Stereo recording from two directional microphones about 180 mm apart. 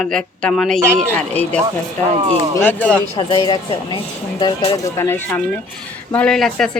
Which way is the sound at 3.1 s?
30° left (ahead or behind).